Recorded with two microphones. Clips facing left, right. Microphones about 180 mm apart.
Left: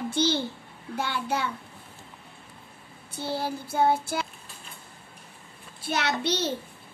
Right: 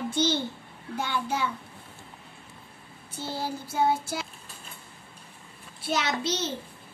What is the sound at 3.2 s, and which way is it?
Child singing, 60° left (ahead or behind).